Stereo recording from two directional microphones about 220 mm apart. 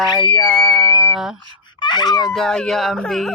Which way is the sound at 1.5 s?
20° left (ahead or behind).